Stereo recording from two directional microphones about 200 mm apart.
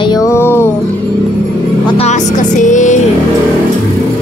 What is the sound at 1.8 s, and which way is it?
Speech, 30° left (ahead or behind).